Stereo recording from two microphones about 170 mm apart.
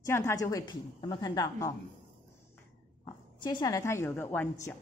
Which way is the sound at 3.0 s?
25° left (ahead or behind).